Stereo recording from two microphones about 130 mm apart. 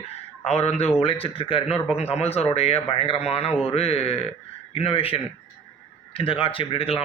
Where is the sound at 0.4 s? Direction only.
55° left (ahead or behind).